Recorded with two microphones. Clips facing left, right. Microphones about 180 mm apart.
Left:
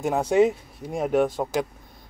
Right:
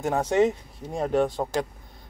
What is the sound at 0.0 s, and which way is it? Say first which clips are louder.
Speech: left 2 dB; 10° left (ahead or behind).